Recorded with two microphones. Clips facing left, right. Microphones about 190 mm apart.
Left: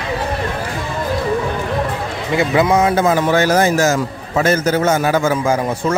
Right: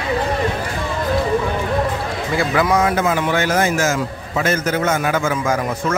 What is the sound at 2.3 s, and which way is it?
Speech, 25° left (ahead or behind).